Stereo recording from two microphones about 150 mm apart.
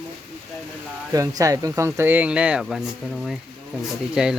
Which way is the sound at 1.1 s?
20° right (ahead or behind).